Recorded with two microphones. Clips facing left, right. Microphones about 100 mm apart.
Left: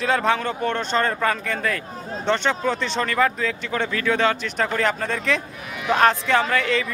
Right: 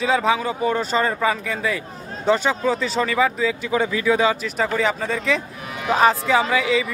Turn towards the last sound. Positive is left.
turn(degrees=-5)  # may be behind; listen again after turning